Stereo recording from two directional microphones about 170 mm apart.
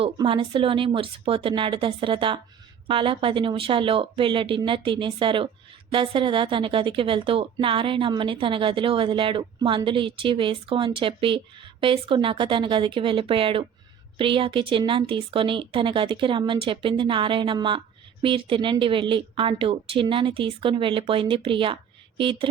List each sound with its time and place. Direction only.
0.0 s a woman's voice: 30° right (ahead or behind)